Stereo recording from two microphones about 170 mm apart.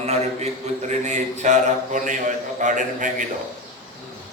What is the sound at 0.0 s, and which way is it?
A man's voice, 40° right (ahead or behind).